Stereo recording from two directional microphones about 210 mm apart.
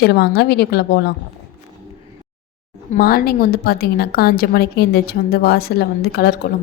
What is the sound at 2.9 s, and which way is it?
A woman's voice, 45° left (ahead or behind).